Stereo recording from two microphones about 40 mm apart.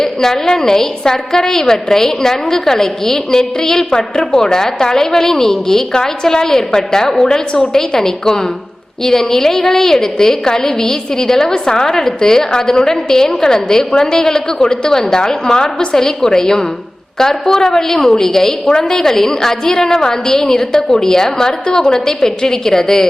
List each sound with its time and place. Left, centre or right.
0.0 s a woman's voice: centre